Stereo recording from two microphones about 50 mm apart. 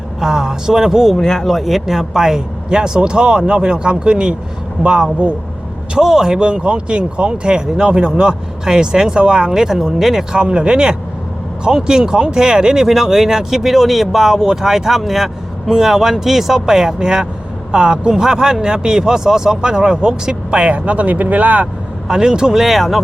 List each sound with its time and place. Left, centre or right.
0.2 s speech: centre
1.1 s speech: centre
10.3 s speech: right
22.0 s speech: centre